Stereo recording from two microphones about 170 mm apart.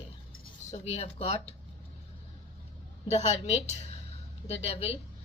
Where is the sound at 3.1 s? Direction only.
40° left (ahead or behind).